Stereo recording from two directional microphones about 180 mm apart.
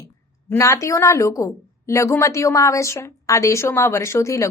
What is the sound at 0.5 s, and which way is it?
A woman's voice, 15° left (ahead or behind).